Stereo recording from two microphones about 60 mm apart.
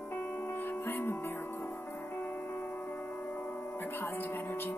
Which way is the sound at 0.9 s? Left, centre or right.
Left.